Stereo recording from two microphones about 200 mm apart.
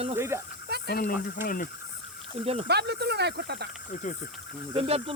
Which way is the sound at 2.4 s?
30° right (ahead or behind).